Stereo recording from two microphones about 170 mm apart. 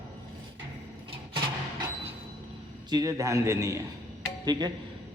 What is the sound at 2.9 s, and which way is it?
Speech, 20° right (ahead or behind).